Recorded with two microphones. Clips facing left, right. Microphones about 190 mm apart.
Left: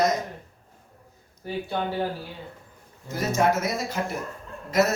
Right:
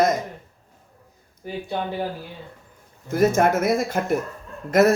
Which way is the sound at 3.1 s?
55° right (ahead or behind).